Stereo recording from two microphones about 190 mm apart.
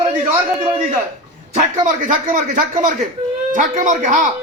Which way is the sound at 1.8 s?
40° right (ahead or behind).